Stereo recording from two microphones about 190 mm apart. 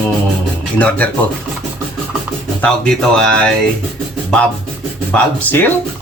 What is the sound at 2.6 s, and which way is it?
Speech, 5° left (ahead or behind).